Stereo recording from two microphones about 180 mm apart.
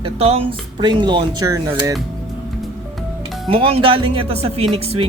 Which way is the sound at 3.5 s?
30° right (ahead or behind).